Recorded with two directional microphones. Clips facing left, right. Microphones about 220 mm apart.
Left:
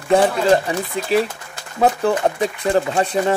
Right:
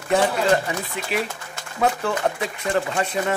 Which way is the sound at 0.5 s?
30° left (ahead or behind).